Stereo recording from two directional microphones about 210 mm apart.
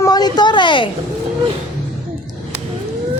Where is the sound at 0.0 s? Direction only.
20° left (ahead or behind).